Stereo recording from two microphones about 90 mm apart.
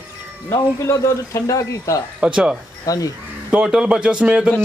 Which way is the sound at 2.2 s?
10° right (ahead or behind).